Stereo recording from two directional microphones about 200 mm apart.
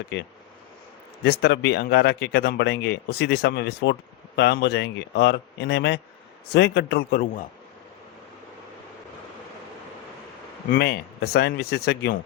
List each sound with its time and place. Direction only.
1.2 s speech: 55° left (ahead or behind)
10.7 s speech: 50° left (ahead or behind)